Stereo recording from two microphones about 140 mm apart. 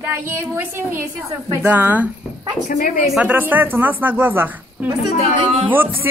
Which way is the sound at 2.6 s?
80° left.